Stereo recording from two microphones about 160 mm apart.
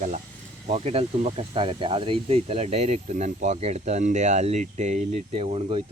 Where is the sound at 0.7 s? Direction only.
40° right (ahead or behind).